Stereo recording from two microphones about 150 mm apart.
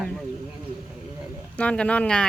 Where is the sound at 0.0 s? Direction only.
5° left (ahead or behind).